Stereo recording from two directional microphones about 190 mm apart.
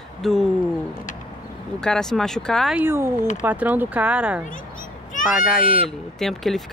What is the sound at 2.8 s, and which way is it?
Speech, 10° right (ahead or behind).